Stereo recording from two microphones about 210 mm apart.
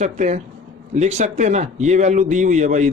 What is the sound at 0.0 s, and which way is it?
A man's voice, 35° right (ahead or behind).